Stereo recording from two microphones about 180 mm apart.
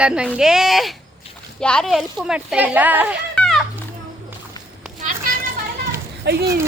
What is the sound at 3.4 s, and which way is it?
Children playing, centre (ahead or behind).